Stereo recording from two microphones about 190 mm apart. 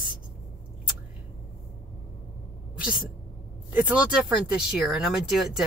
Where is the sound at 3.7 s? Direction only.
5° right (ahead or behind).